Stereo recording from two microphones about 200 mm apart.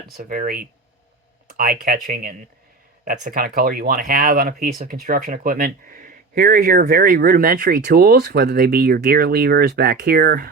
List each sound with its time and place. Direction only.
0.2 s speech: 45° right (ahead or behind)